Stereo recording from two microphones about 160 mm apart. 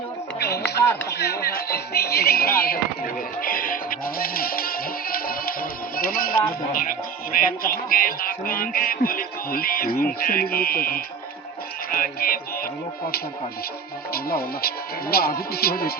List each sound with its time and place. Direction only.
0.3 s speech: 90° left; by 6.3 s 65° left (ahead or behind)
7.3 s speech: 65° left (ahead or behind)
11.9 s music: 65° left (ahead or behind)
14.1 s speech: 70° left (ahead or behind)